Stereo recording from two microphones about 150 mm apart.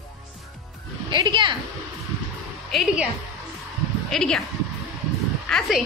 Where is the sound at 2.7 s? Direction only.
Centre (ahead or behind).